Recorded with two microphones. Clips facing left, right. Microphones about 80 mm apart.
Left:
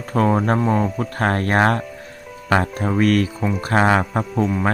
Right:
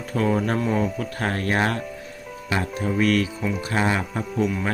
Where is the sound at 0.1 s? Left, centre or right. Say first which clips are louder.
Left 4 dB; left.